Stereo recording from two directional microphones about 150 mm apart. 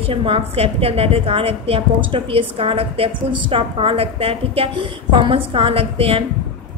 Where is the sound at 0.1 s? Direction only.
35° right (ahead or behind).